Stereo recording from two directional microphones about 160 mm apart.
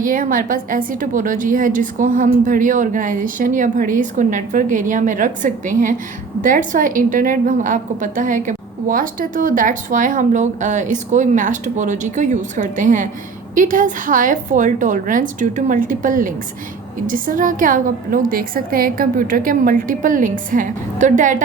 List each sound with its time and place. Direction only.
0.0 s a woman's voice: 60° right (ahead or behind)